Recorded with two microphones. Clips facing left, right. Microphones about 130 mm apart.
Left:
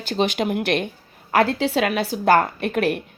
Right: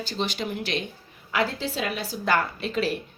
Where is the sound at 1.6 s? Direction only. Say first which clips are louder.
Left 9 dB; 75° left (ahead or behind).